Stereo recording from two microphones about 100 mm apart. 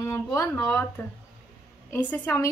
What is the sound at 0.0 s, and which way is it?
Speech, 30° left (ahead or behind).